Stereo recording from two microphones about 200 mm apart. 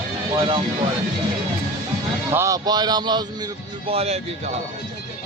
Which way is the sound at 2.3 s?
15° right (ahead or behind).